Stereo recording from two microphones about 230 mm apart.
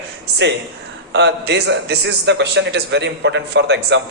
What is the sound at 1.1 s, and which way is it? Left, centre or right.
A man's voice, right.